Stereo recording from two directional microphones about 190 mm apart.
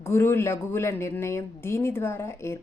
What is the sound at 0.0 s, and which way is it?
Speech, 15° left (ahead or behind).